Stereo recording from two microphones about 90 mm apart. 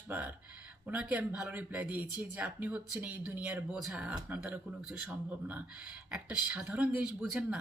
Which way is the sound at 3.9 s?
10° right (ahead or behind).